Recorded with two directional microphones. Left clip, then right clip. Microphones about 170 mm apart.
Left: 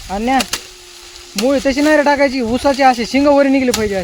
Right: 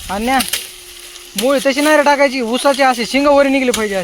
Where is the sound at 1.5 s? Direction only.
20° left (ahead or behind).